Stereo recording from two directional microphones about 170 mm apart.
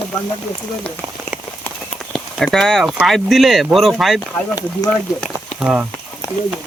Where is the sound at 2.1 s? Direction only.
Centre (ahead or behind).